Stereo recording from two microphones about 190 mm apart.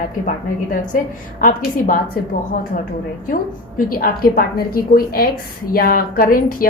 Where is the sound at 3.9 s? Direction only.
50° left (ahead or behind).